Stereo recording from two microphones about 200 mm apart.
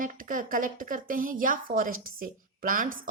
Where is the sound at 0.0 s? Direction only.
40° right (ahead or behind).